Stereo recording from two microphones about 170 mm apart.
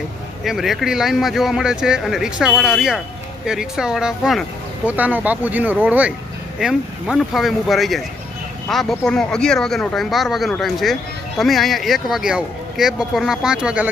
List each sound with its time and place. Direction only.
0.4 s speech: centre (ahead or behind)